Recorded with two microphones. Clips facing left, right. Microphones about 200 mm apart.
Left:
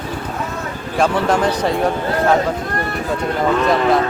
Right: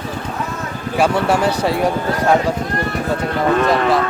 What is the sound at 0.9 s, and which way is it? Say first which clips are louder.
Speech: even; 10° right (ahead or behind).